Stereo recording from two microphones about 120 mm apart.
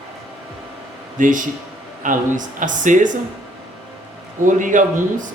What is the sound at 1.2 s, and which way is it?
Speech, 90° right.